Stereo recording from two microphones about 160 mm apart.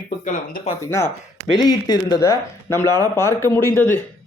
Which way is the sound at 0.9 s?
15° left (ahead or behind).